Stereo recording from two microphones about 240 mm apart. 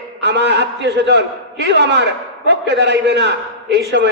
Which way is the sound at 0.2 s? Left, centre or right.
Right.